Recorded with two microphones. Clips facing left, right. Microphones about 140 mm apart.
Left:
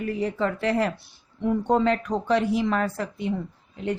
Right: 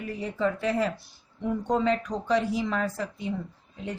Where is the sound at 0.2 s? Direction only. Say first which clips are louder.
Right 1 dB; 70° left (ahead or behind).